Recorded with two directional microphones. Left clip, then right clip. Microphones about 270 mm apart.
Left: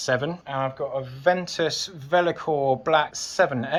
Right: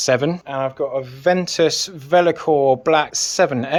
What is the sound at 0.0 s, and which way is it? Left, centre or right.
Speech, right.